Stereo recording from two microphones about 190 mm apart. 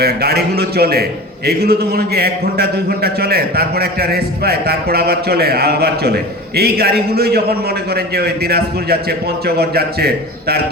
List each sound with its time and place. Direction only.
0.0 s a man's voice: 55° right (ahead or behind)